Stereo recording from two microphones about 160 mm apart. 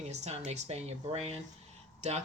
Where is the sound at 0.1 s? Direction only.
45° right (ahead or behind).